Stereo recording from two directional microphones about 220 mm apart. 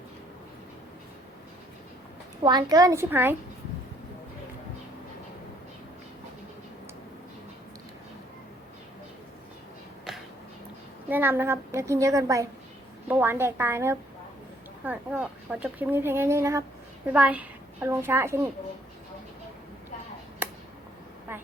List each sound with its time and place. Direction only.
2.4 s speech: 20° right (ahead or behind)
10.1 s music: centre (ahead or behind)
11.1 s speech: 10° right (ahead or behind)